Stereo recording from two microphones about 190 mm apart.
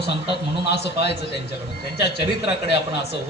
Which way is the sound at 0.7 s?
60° left (ahead or behind).